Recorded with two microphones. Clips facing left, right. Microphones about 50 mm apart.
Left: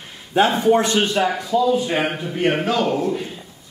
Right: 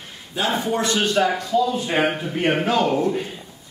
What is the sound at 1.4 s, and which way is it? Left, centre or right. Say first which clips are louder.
A man's voice: left 3 dB; centre.